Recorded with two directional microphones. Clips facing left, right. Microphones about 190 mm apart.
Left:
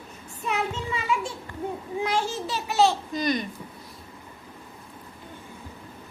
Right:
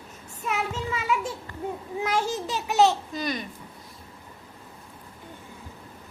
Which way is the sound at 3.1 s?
5° right (ahead or behind).